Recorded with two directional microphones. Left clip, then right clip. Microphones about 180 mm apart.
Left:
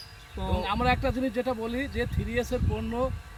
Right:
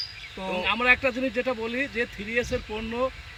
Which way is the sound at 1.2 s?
40° left (ahead or behind).